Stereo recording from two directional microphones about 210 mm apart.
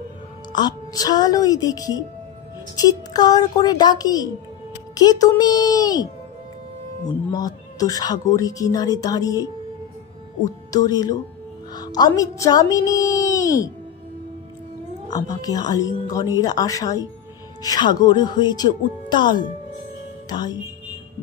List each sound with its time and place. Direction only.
0.5 s speech: 20° left (ahead or behind)
7.3 s speech: 15° left (ahead or behind)
10.7 s speech: 20° left (ahead or behind)
15.0 s speech: 20° left (ahead or behind)